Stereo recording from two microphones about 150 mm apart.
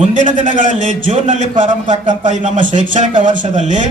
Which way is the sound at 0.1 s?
60° right (ahead or behind).